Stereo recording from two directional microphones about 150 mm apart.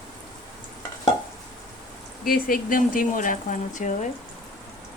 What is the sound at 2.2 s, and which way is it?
Speech, 75° left (ahead or behind).